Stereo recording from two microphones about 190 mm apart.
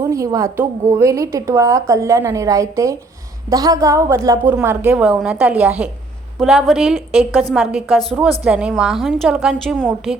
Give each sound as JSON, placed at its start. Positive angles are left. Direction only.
{"t": 0.0, "sound": "a woman's voice", "side_deg": -15}